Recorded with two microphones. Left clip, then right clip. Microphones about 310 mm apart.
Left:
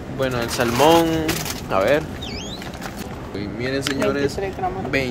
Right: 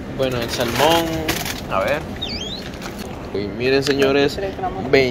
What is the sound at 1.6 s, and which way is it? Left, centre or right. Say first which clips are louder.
Speech: left 3 dB; left.